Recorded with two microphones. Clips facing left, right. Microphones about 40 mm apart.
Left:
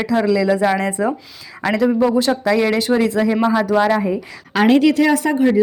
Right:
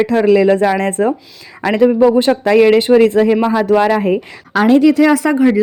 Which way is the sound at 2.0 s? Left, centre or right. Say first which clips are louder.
Right 5 dB; right.